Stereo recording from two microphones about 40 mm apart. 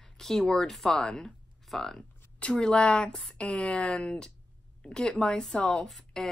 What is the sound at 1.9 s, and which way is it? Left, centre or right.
Speech, left.